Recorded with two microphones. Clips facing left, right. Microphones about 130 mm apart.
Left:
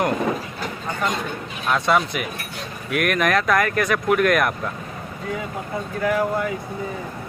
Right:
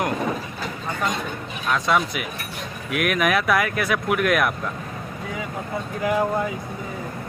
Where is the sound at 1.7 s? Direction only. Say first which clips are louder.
Left 2 dB; centre (ahead or behind).